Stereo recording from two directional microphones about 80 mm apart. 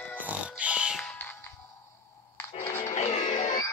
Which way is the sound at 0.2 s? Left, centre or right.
Centre.